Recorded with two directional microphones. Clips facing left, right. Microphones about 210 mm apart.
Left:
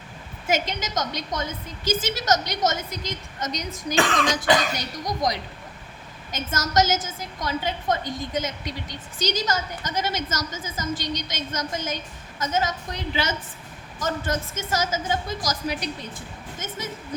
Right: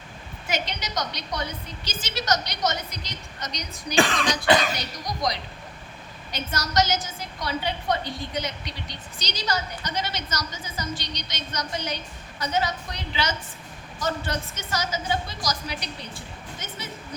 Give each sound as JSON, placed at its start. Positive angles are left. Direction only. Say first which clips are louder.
{"t": 0.4, "sound": "a woman's voice", "louder": "left 5 dB", "side_deg": 45}